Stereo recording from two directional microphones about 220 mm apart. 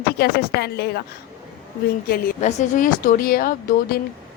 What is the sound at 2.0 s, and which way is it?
A woman's voice, 40° left (ahead or behind).